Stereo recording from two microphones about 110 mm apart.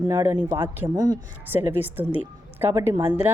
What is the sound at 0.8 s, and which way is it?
Speech, 35° right (ahead or behind).